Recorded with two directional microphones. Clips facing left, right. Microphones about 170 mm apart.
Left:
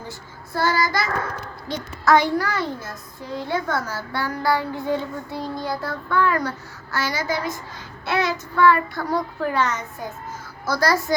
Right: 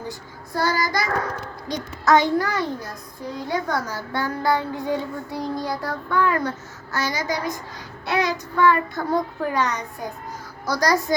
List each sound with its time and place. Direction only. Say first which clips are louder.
0.1 s child singing: right 1 dB; 15° right (ahead or behind)
1.7 s a child's voice: even; 20° right (ahead or behind)
8.0 s child singing: even; 15° right (ahead or behind)
8.5 s a child's voice: left 1 dB; 20° right (ahead or behind)